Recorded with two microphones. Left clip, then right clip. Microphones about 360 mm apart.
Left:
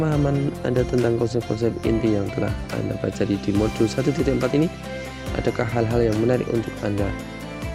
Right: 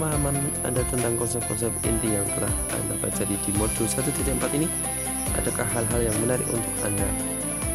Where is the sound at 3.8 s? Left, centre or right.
Right.